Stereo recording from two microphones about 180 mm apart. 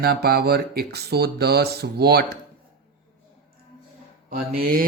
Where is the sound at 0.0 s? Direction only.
60° right (ahead or behind).